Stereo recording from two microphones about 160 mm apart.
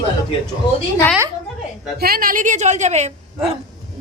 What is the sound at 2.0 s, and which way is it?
A woman's voice, 65° right (ahead or behind).